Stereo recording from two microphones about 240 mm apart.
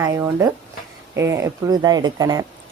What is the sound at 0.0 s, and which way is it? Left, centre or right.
Speech, centre.